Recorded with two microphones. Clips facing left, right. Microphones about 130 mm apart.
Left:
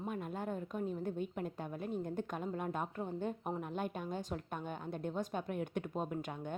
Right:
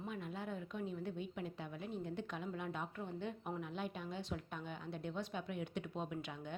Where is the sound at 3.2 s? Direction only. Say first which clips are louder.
Left 3 dB; 45° left (ahead or behind).